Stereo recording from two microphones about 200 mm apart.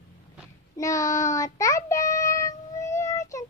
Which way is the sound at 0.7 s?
15° left (ahead or behind).